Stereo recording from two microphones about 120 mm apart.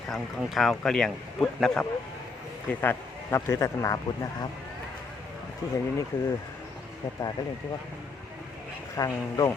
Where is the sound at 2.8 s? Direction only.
20° left (ahead or behind).